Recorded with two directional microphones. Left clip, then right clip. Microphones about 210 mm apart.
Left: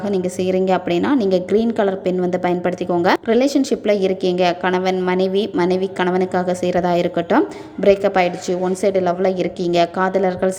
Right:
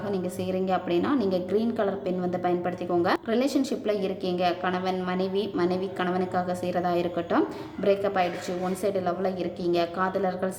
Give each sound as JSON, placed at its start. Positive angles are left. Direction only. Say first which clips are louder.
{"t": 0.0, "sound": "a woman's voice", "louder": "left 10 dB", "side_deg": 30}